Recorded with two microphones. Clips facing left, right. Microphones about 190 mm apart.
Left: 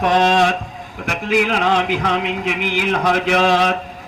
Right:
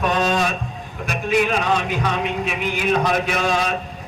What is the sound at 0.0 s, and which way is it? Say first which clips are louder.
A man's voice: left 5 dB; 90° left.